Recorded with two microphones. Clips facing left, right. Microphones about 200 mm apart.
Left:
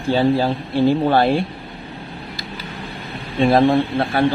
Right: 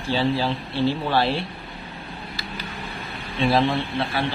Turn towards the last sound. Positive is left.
turn(degrees=50)  # may be behind; listen again after turning